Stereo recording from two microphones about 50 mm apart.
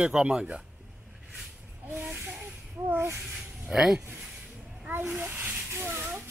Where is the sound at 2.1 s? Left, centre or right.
Centre.